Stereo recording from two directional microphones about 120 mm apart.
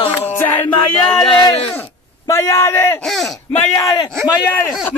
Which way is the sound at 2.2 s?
25° left (ahead or behind).